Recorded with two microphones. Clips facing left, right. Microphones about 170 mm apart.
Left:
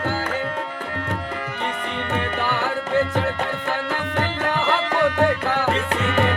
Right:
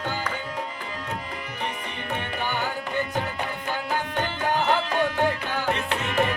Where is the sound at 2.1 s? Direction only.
90° left.